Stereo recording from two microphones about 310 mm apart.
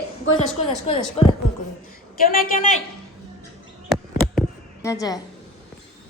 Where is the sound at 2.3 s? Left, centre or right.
Left.